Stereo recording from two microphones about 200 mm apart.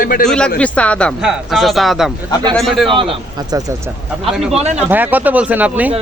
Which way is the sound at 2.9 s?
25° right (ahead or behind).